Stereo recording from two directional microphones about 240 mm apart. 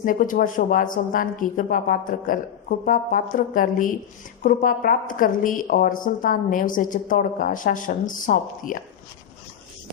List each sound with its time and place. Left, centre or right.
0.0 s a woman's voice: left